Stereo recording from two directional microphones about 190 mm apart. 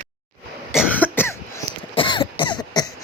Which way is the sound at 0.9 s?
10° left (ahead or behind).